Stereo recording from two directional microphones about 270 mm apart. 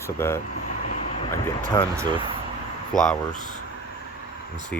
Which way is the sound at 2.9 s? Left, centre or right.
Centre.